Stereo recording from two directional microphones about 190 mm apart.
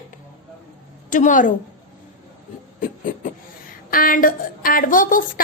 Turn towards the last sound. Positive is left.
turn(degrees=45)  # may be behind; listen again after turning